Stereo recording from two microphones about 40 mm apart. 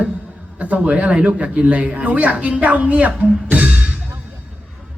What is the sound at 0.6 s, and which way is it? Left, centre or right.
Speech, right.